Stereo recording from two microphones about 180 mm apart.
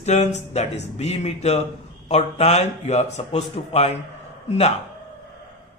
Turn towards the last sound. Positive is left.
turn(degrees=35)  # may be behind; listen again after turning